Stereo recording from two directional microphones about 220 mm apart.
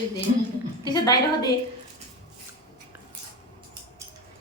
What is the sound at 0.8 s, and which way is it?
Speech, 15° left (ahead or behind).